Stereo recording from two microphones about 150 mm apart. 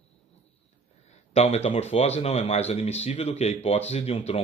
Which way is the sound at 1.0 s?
45° left (ahead or behind).